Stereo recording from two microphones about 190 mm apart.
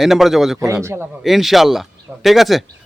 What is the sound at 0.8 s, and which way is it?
Speech, 15° right (ahead or behind).